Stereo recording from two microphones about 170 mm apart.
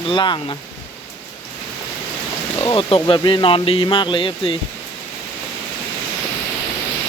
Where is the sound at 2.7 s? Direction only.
30° left (ahead or behind).